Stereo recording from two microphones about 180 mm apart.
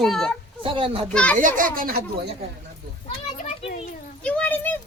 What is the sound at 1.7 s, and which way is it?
Speech, 50° right (ahead or behind).